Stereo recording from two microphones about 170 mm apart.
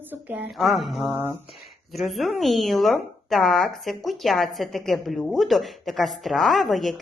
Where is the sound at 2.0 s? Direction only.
Centre (ahead or behind).